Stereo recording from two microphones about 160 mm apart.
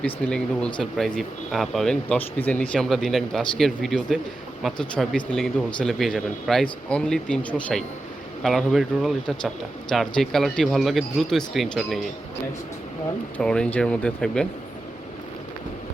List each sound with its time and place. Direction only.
0.0 s speech: 5° left (ahead or behind)
13.3 s speech: 5° left (ahead or behind)